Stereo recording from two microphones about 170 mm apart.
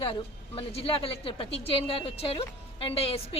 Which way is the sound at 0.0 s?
35° left (ahead or behind).